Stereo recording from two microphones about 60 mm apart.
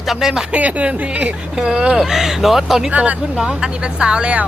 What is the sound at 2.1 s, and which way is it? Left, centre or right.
Speech, centre.